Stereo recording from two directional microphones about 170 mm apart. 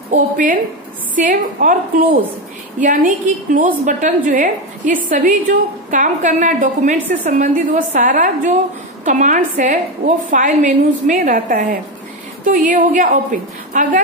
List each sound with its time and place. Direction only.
0.1 s a woman's voice: 50° right (ahead or behind)